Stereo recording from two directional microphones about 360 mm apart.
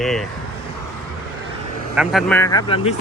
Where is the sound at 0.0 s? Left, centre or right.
Centre.